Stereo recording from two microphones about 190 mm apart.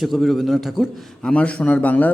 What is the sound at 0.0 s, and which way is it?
A man's voice, centre (ahead or behind).